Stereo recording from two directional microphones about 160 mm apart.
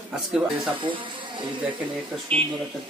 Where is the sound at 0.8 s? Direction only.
30° right (ahead or behind).